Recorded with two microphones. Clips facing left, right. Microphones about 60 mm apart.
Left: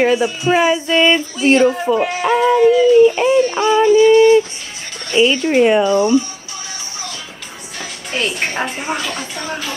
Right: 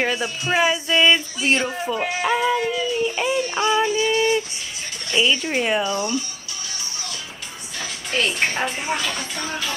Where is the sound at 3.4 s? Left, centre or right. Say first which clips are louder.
Left 7 dB; left.